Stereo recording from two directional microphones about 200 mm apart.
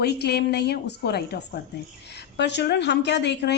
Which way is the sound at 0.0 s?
55° left (ahead or behind).